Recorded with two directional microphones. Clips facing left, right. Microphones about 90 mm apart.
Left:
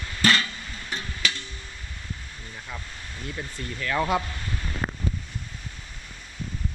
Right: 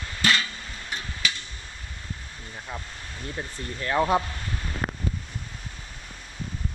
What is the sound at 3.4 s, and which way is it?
Speech, 30° right (ahead or behind).